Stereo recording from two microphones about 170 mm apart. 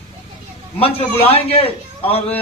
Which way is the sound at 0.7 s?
35° left (ahead or behind).